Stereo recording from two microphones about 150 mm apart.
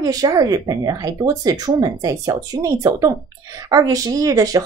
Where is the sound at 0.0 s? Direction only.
25° right (ahead or behind).